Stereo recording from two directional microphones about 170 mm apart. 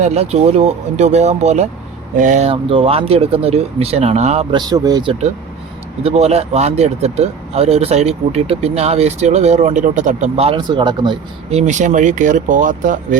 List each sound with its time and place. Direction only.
0.0 s speech: 40° right (ahead or behind)
2.5 s speech: 35° right (ahead or behind)
4.5 s speech: 25° right (ahead or behind)
6.0 s speech: 35° right (ahead or behind)
11.5 s speech: 45° right (ahead or behind)